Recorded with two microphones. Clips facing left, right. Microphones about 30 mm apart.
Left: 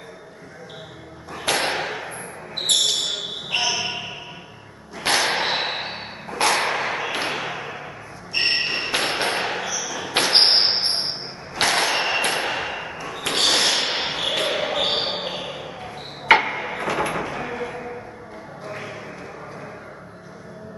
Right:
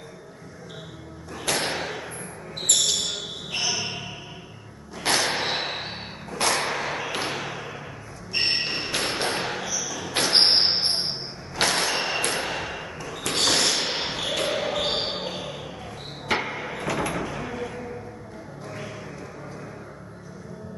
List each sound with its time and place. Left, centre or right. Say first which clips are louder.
1.3 s thump: left 4 dB; left
2.5 s basketball bounce: left 4 dB; left
3.4 s music: left 5 dB; left
4.9 s whip: left 3 dB; left
8.5 s a sound: left 6 dB; left
16.3 s hammer: left 6 dB; left
18.7 s music: left 4 dB; left